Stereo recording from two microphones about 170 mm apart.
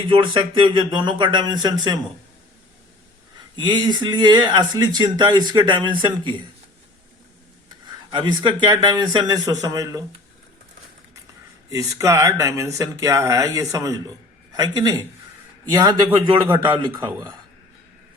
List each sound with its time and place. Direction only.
0.0 s speech: 30° right (ahead or behind)
3.5 s speech: 25° right (ahead or behind)
8.1 s speech: 25° right (ahead or behind)
11.7 s speech: 20° right (ahead or behind)
17.1 s speech: 15° right (ahead or behind)